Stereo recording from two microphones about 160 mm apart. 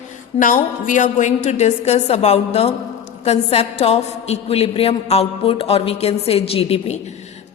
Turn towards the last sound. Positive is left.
turn(degrees=40)  # may be behind; listen again after turning